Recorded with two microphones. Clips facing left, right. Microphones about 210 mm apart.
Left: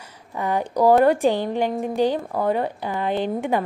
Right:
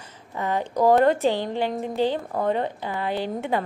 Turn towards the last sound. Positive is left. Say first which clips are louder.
# left 3 dB
turn(degrees=15)  # may be behind; listen again after turning